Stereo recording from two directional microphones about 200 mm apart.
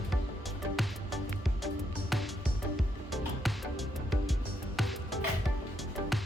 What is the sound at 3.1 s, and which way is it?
Music, centre (ahead or behind).